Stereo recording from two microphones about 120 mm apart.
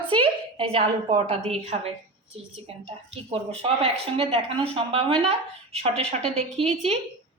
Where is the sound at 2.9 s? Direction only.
55° right (ahead or behind).